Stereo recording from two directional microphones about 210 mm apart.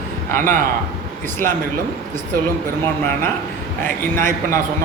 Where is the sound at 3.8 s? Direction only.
10° left (ahead or behind).